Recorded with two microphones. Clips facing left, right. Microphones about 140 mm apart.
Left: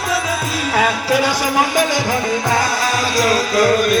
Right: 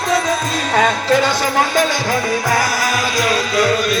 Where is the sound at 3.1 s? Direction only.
35° left (ahead or behind).